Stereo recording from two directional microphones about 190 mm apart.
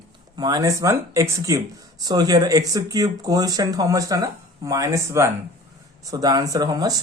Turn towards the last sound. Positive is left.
turn(degrees=-20)  # may be behind; listen again after turning